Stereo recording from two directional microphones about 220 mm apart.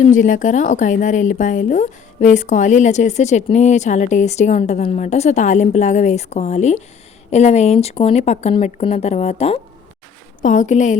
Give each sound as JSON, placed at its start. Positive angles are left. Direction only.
{"t": 0.1, "sound": "speech", "side_deg": 35}